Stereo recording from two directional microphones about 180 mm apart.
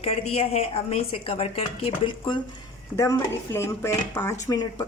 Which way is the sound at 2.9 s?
15° left (ahead or behind).